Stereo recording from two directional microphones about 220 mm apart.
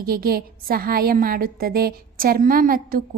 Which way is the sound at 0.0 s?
40° right (ahead or behind).